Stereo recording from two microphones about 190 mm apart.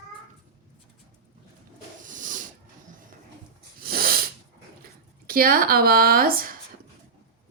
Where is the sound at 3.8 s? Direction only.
50° right (ahead or behind).